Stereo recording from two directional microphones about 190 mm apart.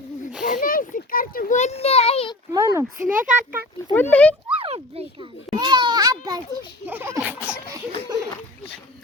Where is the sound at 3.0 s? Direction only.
45° right (ahead or behind).